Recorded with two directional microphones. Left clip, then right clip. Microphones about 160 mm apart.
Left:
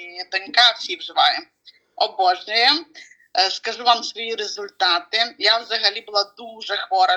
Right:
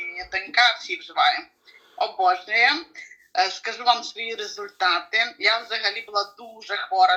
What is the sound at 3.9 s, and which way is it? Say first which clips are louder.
Speech: left 4 dB; 50° left (ahead or behind).